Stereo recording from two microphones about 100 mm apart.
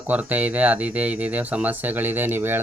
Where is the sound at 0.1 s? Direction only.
15° right (ahead or behind).